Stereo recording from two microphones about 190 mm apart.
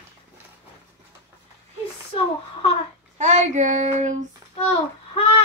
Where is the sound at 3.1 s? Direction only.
40° right (ahead or behind).